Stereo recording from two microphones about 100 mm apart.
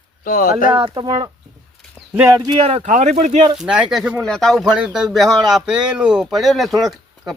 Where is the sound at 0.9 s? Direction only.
45° right (ahead or behind).